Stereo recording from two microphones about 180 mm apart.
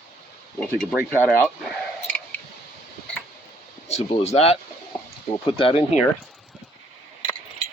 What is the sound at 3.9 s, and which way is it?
Speech, 35° left (ahead or behind).